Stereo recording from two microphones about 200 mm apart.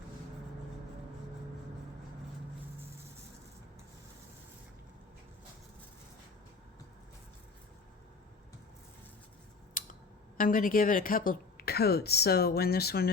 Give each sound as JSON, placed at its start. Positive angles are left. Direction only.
{"t": 9.8, "sound": "music", "side_deg": 45}
{"t": 10.3, "sound": "speech", "side_deg": 45}